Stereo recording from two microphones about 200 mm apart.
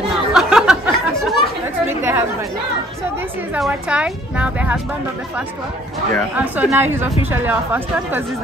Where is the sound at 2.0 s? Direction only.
10° right (ahead or behind).